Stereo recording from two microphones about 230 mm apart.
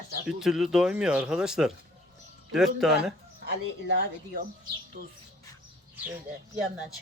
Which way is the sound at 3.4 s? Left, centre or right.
Right.